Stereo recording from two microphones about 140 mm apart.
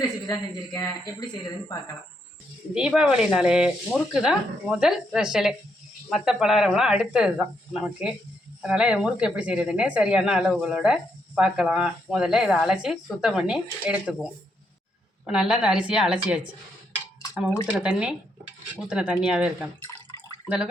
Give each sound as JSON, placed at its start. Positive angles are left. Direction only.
{"t": 0.0, "sound": "speech", "side_deg": 25}
{"t": 2.7, "sound": "speech", "side_deg": -5}
{"t": 15.3, "sound": "speech", "side_deg": -5}
{"t": 17.8, "sound": "speech", "side_deg": -5}